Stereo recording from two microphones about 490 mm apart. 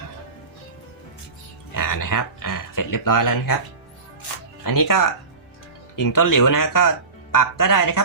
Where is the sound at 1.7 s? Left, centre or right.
Left.